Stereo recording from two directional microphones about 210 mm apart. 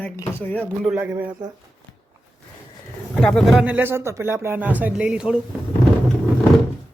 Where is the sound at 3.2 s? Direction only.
Centre (ahead or behind).